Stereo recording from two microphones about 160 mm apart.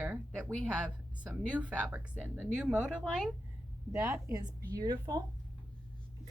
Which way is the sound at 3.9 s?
15° right (ahead or behind).